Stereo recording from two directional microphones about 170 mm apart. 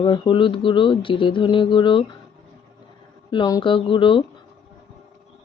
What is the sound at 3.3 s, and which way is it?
Speech, 25° left (ahead or behind).